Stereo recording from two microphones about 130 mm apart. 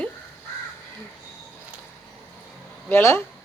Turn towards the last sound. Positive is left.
turn(degrees=20)  # may be behind; listen again after turning